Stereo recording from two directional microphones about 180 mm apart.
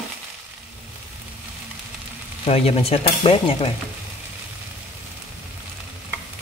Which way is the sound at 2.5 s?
35° left (ahead or behind).